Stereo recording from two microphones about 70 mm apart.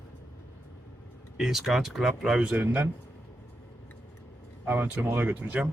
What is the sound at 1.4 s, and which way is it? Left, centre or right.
Speech, centre.